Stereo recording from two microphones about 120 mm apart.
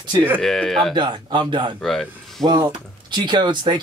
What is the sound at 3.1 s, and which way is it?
Speech, 40° right (ahead or behind).